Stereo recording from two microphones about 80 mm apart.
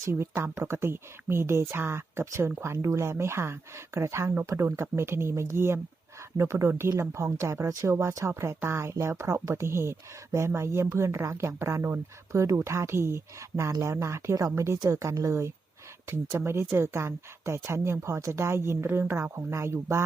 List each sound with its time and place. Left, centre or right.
0.0 s speech: right